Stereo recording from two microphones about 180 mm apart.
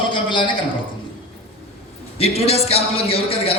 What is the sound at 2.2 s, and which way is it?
Speech, 35° left (ahead or behind).